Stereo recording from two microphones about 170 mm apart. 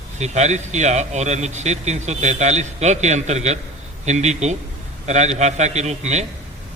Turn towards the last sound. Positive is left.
turn(degrees=-40)  # may be behind; listen again after turning